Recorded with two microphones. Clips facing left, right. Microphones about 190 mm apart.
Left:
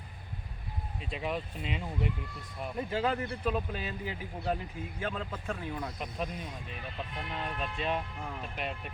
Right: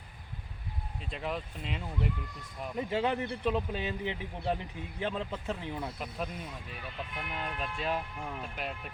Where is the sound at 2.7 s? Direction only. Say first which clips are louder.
Right 1 dB; 20° right (ahead or behind).